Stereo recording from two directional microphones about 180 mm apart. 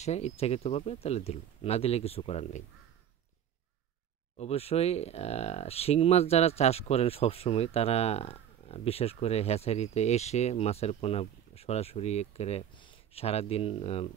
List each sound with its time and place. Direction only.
0.0 s speech: 35° left (ahead or behind)
4.4 s speech: 35° left (ahead or behind)